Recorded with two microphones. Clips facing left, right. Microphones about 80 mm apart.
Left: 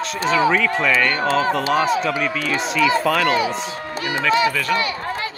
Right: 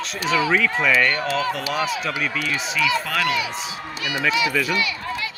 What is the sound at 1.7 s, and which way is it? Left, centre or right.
Speech, left.